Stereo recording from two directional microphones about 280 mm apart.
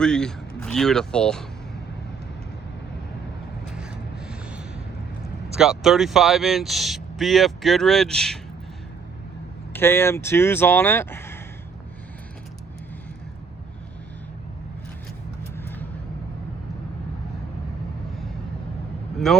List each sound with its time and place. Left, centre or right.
0.0 s speech: centre
5.5 s speech: centre
9.7 s speech: centre
15.5 s vehicle: centre
19.3 s speech: centre